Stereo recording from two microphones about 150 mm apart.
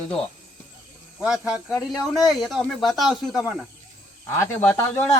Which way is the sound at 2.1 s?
Centre (ahead or behind).